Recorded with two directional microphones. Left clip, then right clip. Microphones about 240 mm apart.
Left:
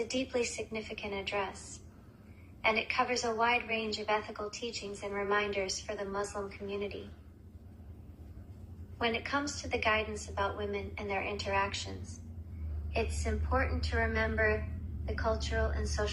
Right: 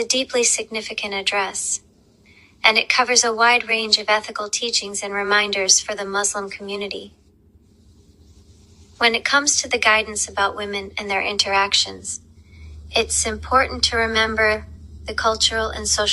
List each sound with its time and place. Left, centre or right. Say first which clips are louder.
0.0 s a woman's voice: right 14 dB; right
2.6 s a woman's voice: right 14 dB; right
9.0 s a woman's voice: right 16 dB; right